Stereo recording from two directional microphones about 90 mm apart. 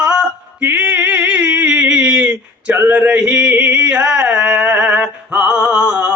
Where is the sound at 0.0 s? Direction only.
10° right (ahead or behind).